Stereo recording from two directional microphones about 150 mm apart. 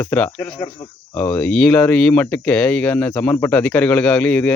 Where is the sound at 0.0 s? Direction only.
10° left (ahead or behind).